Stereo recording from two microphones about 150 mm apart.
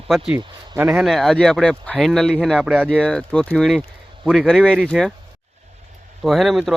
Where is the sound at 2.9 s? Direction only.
5° left (ahead or behind).